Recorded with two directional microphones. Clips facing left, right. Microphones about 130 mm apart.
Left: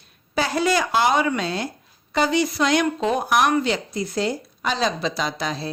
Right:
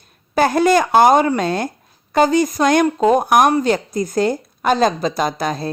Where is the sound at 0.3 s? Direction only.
50° right (ahead or behind).